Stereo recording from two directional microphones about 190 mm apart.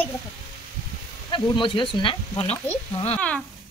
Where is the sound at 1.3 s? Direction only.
25° left (ahead or behind).